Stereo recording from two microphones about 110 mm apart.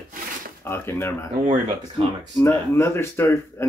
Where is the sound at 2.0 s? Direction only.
65° right (ahead or behind).